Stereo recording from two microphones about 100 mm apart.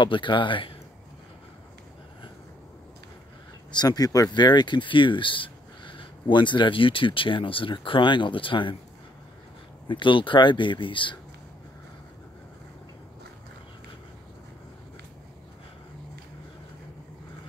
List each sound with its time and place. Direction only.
0.0 s speech: 55° left (ahead or behind)
3.7 s speech: 40° left (ahead or behind)
9.8 s speech: 55° left (ahead or behind)